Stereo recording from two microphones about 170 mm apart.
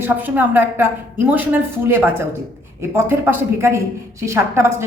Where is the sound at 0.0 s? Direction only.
10° right (ahead or behind).